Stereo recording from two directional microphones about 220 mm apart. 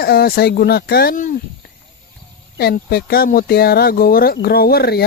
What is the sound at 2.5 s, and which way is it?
Speech, 45° left (ahead or behind).